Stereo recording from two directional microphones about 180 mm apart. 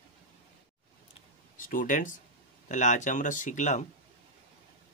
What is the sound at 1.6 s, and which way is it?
Speech, 50° left (ahead or behind).